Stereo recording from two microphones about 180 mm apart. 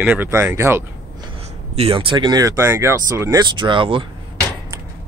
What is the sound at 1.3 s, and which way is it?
Speech, 30° right (ahead or behind).